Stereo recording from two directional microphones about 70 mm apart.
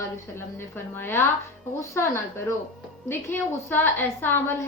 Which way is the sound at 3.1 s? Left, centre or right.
Left.